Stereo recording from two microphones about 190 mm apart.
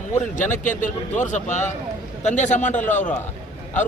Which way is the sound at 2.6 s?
10° left (ahead or behind).